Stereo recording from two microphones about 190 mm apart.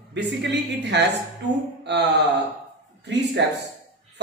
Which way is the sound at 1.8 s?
65° right (ahead or behind).